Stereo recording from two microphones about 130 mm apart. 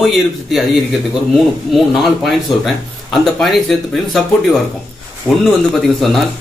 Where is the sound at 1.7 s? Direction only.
Centre (ahead or behind).